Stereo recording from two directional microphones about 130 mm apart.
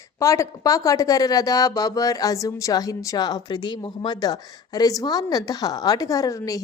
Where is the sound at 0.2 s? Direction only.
25° left (ahead or behind).